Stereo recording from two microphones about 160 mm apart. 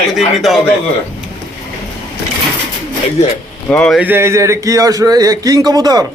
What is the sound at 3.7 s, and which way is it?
Speech, 5° left (ahead or behind).